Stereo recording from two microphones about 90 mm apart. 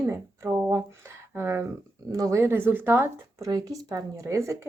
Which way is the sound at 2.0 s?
35° right (ahead or behind).